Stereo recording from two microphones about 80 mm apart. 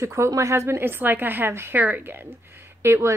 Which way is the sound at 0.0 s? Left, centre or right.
Right.